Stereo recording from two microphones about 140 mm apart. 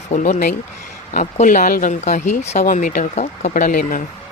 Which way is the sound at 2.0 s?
60° left (ahead or behind).